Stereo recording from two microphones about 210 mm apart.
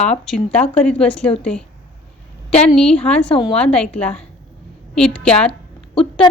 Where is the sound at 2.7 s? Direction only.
5° left (ahead or behind).